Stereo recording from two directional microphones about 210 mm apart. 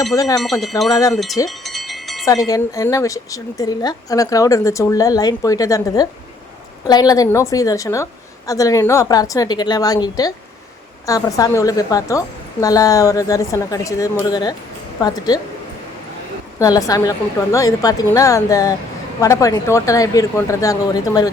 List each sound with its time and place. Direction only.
0.1 s speech: 15° left (ahead or behind)
0.6 s speech: centre (ahead or behind)
1.5 s wind chime: centre (ahead or behind)
2.2 s a woman's voice: 15° left (ahead or behind)
16.6 s speech: 15° left (ahead or behind)